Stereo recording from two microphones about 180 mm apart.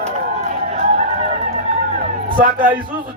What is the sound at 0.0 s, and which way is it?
Run, 40° right (ahead or behind).